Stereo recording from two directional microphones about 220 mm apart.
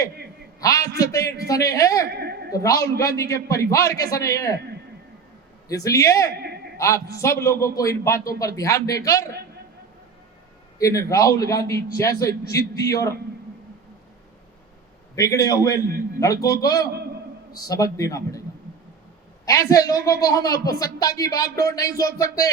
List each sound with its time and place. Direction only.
0.6 s speech: 15° left (ahead or behind)
2.0 s a sound: 45° right (ahead or behind)
2.5 s speech: 15° left (ahead or behind)
5.6 s speech: 15° left (ahead or behind)
6.4 s a sound: 45° right (ahead or behind)
6.7 s speech: 15° left (ahead or behind)
10.8 s speech: 15° left (ahead or behind)
15.1 s speech: 15° left (ahead or behind)
19.5 s speech: 15° left (ahead or behind)